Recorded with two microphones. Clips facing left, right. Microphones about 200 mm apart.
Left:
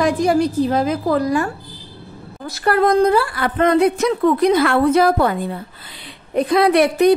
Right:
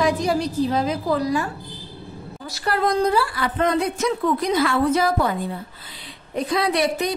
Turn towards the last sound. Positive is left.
turn(degrees=60)  # may be behind; listen again after turning